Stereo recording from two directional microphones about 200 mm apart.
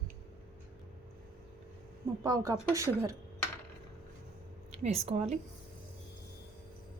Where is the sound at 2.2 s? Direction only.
15° right (ahead or behind).